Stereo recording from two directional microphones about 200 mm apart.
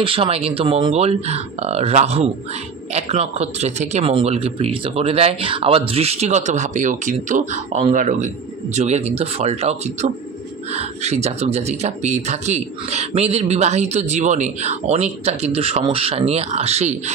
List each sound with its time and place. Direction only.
0.0 s speech: 25° right (ahead or behind)